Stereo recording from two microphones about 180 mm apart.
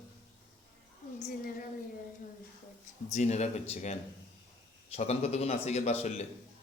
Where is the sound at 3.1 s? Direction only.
40° left (ahead or behind).